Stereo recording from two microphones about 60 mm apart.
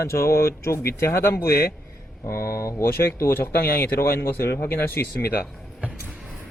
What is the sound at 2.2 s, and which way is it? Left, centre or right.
Speech, left.